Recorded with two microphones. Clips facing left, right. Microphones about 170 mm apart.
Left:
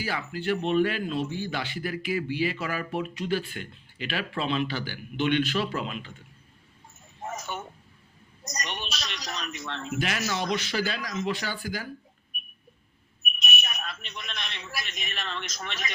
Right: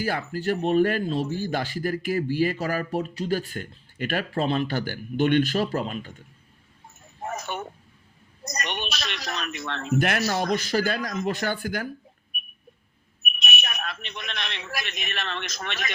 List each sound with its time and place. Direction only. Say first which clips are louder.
0.0 s speech: right 4 dB; 50° right (ahead or behind)
7.3 s speech: right 3 dB; 65° right (ahead or behind)
13.4 s a sound: right 3 dB; 65° right (ahead or behind)